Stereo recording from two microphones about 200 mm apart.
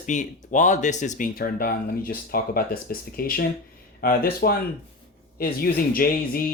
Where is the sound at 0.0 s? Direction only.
40° left (ahead or behind).